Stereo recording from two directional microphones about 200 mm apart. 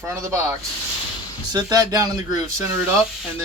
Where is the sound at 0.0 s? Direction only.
15° right (ahead or behind).